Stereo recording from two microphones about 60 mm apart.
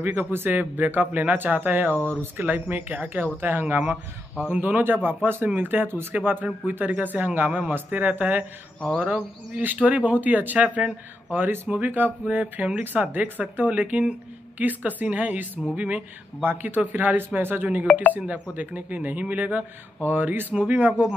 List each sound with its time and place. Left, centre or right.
0.0 s speech: right
4.5 s speech: right
18.2 s speech: right